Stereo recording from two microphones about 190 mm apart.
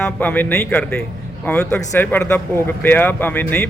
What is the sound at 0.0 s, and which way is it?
A man's voice, 10° left (ahead or behind).